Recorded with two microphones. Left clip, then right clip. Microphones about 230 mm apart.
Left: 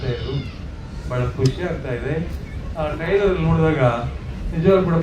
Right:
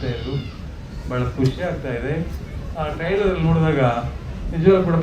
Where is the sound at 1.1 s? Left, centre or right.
Right.